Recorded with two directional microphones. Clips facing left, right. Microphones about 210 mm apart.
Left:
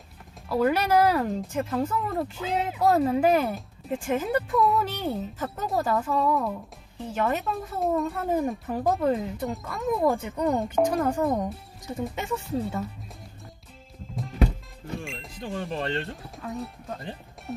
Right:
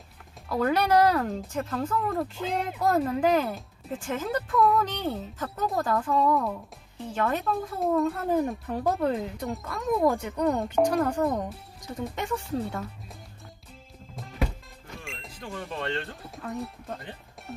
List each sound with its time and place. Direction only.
0.5 s speech: 5° left (ahead or behind)
4.0 s speech: 15° left (ahead or behind)
4.6 s speech: 5° left (ahead or behind)
15.4 s speech: 25° left (ahead or behind)
16.2 s speech: centre (ahead or behind)